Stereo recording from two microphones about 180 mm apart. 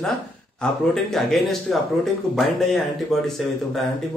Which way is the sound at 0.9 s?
Centre (ahead or behind).